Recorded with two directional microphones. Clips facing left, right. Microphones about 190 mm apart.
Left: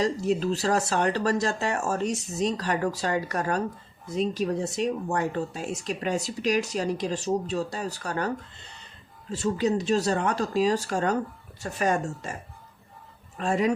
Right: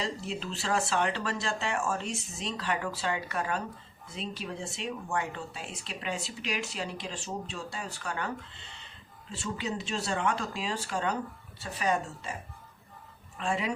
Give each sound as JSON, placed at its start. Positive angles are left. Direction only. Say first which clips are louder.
{"t": 0.0, "sound": "speech", "louder": "left 10 dB", "side_deg": 40}
{"t": 9.3, "sound": "speech", "louder": "left 10 dB", "side_deg": 40}